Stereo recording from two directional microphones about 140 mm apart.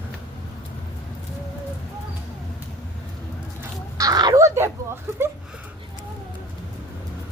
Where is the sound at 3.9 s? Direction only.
25° right (ahead or behind).